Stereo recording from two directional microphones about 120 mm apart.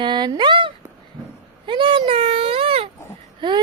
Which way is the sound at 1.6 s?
45° right (ahead or behind).